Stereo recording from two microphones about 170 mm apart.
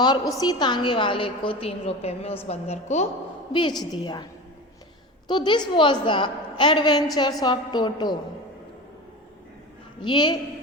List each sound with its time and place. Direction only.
0.0 s a woman's voice: 25° left (ahead or behind); by 3.1 s 45° left (ahead or behind)
3.5 s a woman's voice: 25° left (ahead or behind)
5.3 s a woman's voice: 25° left (ahead or behind)
10.0 s a woman's voice: 30° left (ahead or behind)